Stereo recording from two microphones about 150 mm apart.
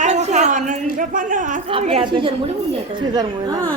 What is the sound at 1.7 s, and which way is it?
Speech, 45° right (ahead or behind).